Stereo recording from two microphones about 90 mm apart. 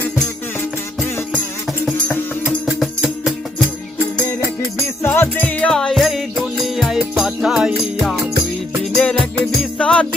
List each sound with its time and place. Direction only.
5.0 s music: 25° left (ahead or behind)
5.7 s music: centre (ahead or behind)
9.7 s music: 10° left (ahead or behind)